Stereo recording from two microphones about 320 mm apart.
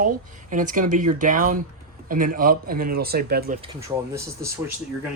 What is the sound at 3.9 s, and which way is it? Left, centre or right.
Speech, centre.